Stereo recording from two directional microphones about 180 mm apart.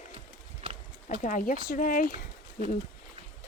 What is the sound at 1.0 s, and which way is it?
Speech, 45° left (ahead or behind).